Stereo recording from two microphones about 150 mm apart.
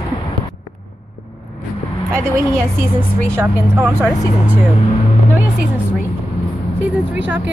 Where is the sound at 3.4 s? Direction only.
15° right (ahead or behind).